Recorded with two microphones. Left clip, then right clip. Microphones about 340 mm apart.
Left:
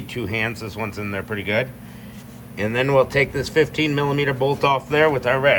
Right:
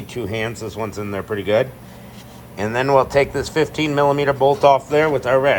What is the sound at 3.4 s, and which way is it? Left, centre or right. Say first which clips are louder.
Speech: even; right.